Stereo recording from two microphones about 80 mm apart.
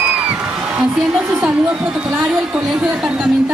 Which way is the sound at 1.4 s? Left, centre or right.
Centre.